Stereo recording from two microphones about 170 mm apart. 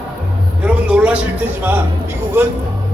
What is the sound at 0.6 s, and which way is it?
Speech, 5° right (ahead or behind).